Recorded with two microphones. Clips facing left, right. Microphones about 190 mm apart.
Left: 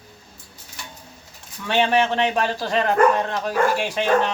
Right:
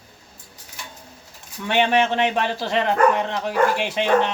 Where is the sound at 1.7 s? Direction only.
20° right (ahead or behind).